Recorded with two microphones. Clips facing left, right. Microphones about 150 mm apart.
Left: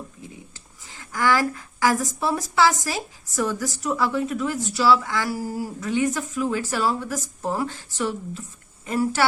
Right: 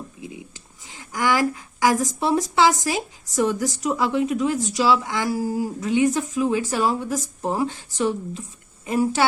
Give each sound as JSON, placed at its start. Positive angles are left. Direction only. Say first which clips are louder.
{"t": 0.2, "sound": "speech", "louder": "right 5 dB", "side_deg": -15}